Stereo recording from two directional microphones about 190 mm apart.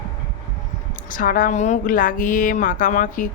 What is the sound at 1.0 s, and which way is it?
A woman's voice, 45° left (ahead or behind).